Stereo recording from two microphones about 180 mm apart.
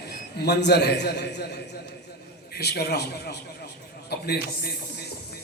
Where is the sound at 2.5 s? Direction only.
60° left (ahead or behind).